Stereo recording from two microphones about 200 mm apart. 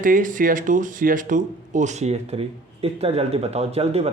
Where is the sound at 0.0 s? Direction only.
40° right (ahead or behind).